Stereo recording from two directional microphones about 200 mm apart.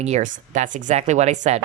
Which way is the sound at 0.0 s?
35° right (ahead or behind).